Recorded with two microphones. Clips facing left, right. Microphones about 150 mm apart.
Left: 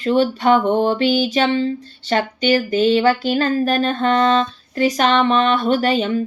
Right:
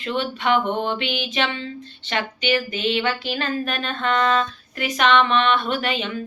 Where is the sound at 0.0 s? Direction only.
40° left (ahead or behind).